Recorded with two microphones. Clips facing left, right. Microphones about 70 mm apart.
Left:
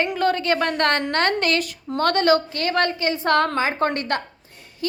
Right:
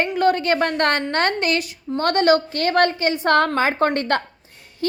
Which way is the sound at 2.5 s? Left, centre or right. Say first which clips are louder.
Right 4 dB; right.